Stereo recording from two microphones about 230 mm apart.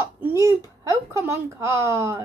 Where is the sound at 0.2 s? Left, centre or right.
Centre.